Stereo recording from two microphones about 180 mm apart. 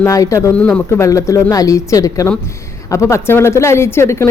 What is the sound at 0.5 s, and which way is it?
Speech, 5° left (ahead or behind).